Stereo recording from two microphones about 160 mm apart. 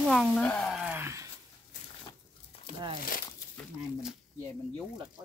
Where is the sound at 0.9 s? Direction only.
15° right (ahead or behind).